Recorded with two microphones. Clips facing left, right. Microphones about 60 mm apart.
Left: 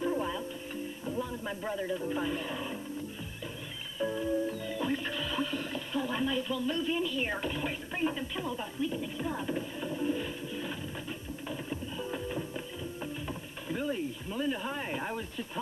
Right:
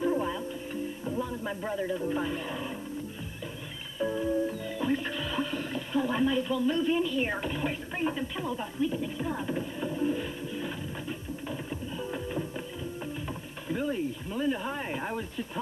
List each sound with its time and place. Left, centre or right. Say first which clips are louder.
0.0 s music: right 3 dB; centre
1.0 s speech: right 1 dB; centre
4.0 s music: right 2 dB; centre
13.0 s speech: right 1 dB; centre